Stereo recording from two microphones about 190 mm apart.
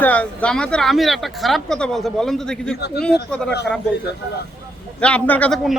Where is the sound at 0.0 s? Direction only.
10° left (ahead or behind).